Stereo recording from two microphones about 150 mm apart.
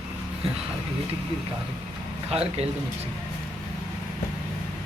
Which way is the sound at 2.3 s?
45° right (ahead or behind).